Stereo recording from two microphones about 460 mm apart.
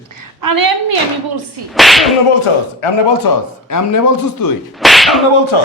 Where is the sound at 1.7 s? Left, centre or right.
Centre.